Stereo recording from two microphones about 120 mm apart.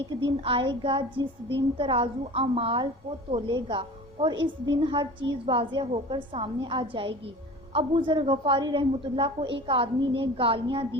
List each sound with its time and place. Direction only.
0.3 s a woman's voice: 45° right (ahead or behind)